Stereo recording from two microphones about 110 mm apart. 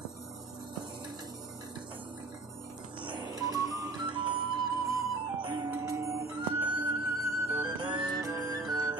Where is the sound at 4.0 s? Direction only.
50° right (ahead or behind).